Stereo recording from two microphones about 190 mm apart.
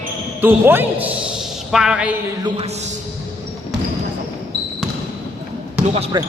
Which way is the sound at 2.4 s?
30° right (ahead or behind).